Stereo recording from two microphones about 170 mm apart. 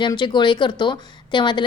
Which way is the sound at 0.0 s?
25° left (ahead or behind).